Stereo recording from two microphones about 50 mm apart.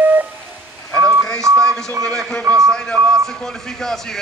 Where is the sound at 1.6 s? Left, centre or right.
Centre.